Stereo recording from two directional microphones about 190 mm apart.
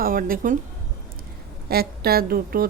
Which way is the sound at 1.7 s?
55° right (ahead or behind).